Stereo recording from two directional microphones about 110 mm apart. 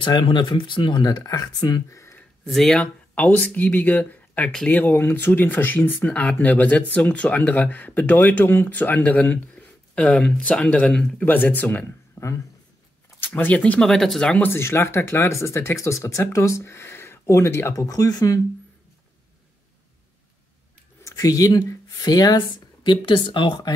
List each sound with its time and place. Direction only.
0.0 s speech: 45° left (ahead or behind); by 2.2 s 25° left (ahead or behind)
2.4 s speech: centre (ahead or behind)
12.2 s a sound: 25° left (ahead or behind)
13.2 s speech: 15° left (ahead or behind); by 18.4 s 35° left (ahead or behind)
21.0 s speech: 35° left (ahead or behind)
22.8 s speech: 50° left (ahead or behind)